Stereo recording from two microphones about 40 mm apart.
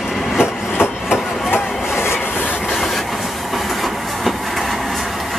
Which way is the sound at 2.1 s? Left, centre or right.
Left.